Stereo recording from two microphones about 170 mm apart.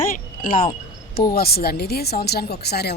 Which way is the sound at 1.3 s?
65° left (ahead or behind).